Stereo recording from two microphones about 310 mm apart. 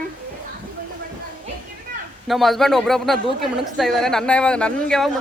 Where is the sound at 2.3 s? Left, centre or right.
Centre.